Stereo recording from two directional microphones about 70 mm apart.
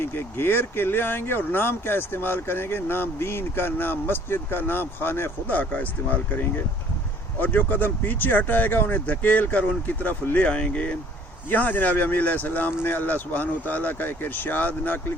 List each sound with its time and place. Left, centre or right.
0.0 s speech: left